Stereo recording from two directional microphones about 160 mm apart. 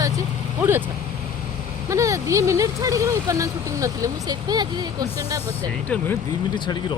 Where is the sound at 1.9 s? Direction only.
20° right (ahead or behind).